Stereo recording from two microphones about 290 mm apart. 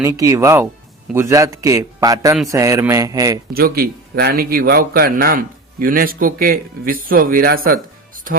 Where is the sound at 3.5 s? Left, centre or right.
Right.